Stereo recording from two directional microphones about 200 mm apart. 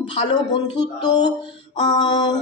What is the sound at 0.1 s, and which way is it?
A man's voice, 20° left (ahead or behind).